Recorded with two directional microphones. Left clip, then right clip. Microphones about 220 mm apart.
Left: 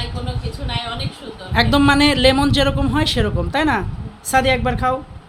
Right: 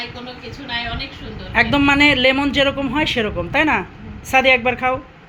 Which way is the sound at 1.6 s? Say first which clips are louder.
Even; 20° left (ahead or behind).